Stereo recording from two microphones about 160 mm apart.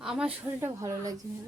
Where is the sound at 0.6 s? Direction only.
20° right (ahead or behind).